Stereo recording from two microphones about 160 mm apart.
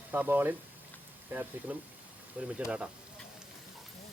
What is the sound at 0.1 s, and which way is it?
Speech, 15° right (ahead or behind).